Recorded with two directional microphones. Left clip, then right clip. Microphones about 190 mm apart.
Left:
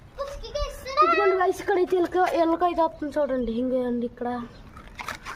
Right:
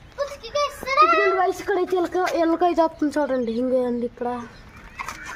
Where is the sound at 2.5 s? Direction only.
30° right (ahead or behind).